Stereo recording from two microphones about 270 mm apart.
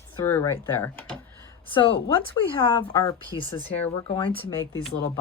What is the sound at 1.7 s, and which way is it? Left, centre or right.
Speech, centre.